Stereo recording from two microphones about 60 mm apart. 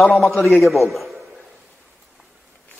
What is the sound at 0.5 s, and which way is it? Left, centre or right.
Speech, centre.